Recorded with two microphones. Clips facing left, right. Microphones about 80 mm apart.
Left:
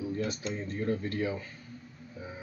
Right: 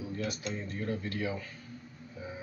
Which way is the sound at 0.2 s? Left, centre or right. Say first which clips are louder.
Left 2 dB; left.